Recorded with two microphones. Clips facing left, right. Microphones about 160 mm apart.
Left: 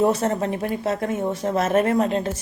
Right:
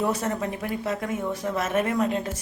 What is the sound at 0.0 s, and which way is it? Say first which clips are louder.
Speech: left 6 dB; 30° left (ahead or behind).